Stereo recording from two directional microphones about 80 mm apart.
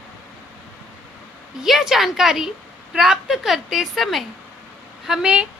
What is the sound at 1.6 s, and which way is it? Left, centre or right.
A woman's voice, centre.